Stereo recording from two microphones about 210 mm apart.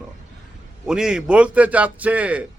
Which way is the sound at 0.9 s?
5° right (ahead or behind).